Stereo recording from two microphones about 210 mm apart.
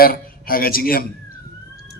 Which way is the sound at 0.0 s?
45° left (ahead or behind).